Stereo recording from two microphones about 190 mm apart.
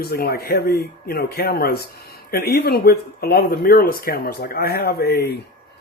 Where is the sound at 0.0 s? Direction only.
55° left (ahead or behind).